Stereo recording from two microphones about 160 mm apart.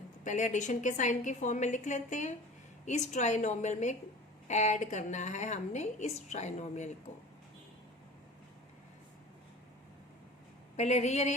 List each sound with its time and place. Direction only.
0.3 s a woman's voice: 50° left (ahead or behind)
10.8 s a woman's voice: 45° left (ahead or behind)